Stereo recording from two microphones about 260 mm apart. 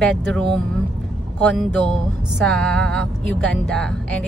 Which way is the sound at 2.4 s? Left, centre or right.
Centre.